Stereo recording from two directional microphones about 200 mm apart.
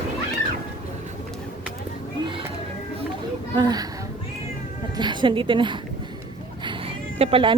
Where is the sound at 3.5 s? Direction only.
20° right (ahead or behind).